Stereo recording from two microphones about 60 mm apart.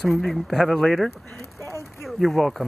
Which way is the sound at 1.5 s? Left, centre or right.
Right.